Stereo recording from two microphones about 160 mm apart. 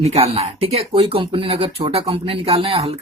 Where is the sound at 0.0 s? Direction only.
40° right (ahead or behind).